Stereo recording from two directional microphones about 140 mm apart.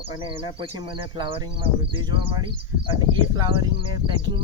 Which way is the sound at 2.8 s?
30° right (ahead or behind).